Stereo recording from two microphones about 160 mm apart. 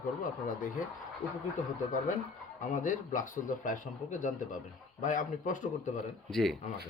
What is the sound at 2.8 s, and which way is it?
A man's voice, 55° left (ahead or behind).